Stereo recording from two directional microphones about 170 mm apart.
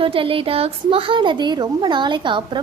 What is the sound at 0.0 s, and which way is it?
A woman's voice, 30° right (ahead or behind).